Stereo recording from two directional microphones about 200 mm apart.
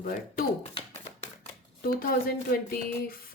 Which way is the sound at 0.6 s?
35° left (ahead or behind).